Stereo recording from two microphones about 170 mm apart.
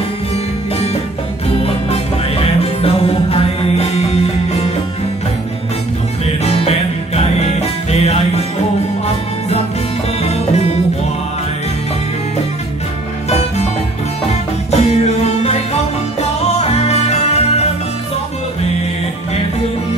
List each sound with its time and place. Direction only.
1.6 s music: 35° left (ahead or behind)
6.4 s music: 35° left (ahead or behind)
10.2 s music: 40° left (ahead or behind)
14.7 s music: 40° left (ahead or behind)